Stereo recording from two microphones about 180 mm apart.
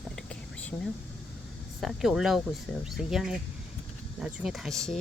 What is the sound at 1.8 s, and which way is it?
Speech, centre (ahead or behind).